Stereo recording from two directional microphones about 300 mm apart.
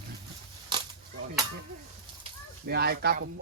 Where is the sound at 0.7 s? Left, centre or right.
Centre.